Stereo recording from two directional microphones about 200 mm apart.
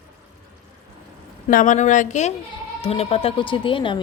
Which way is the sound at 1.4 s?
40° left (ahead or behind).